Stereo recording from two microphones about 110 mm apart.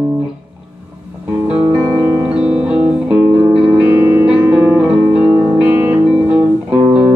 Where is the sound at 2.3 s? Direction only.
10° right (ahead or behind).